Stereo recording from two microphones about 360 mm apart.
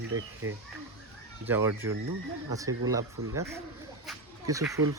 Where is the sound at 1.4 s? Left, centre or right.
Centre.